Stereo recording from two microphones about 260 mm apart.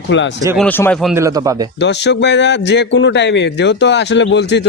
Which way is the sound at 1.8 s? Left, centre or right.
Left.